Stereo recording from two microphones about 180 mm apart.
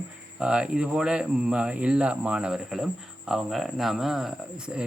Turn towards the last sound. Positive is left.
turn(degrees=-5)  # may be behind; listen again after turning